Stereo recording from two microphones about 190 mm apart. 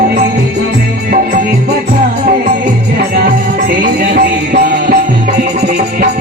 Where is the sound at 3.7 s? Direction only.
50° right (ahead or behind).